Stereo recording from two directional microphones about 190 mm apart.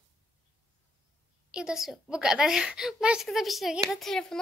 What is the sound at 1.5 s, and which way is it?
Speech, 5° right (ahead or behind).